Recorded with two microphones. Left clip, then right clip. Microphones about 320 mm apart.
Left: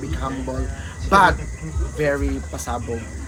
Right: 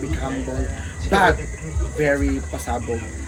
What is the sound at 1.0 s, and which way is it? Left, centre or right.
Speech, centre.